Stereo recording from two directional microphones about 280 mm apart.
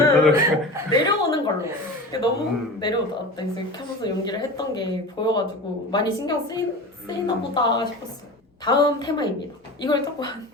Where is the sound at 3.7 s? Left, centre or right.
Centre.